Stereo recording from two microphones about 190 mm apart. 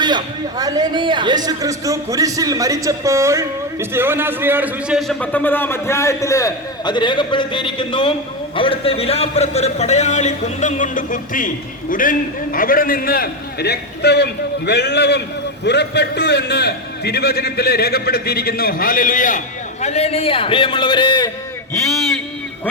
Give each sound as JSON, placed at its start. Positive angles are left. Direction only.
{"t": 0.0, "sound": "a man's voice", "side_deg": -20}
{"t": 19.8, "sound": "a man's voice", "side_deg": 35}